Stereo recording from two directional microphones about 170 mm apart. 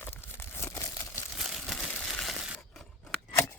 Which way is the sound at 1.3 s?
Centre (ahead or behind).